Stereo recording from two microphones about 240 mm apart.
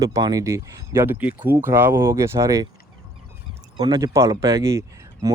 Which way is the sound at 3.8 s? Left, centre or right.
Centre.